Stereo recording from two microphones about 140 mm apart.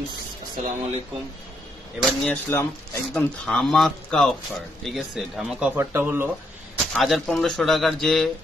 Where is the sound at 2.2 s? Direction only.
15° left (ahead or behind).